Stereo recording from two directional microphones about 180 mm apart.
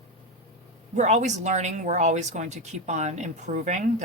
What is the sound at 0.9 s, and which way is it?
A woman's voice, 40° right (ahead or behind).